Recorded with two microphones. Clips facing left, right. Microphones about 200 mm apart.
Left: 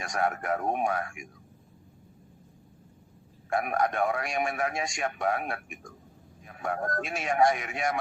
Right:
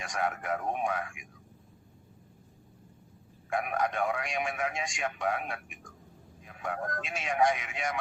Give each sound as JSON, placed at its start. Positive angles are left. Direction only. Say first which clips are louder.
{"t": 0.0, "sound": "a man's voice", "louder": "left 3 dB", "side_deg": 45}
{"t": 3.5, "sound": "a man's voice", "louder": "left 3 dB", "side_deg": 45}